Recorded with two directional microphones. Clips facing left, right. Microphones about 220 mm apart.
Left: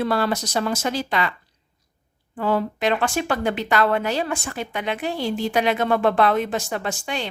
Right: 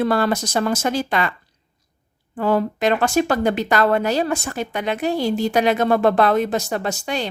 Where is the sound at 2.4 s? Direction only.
45° right (ahead or behind).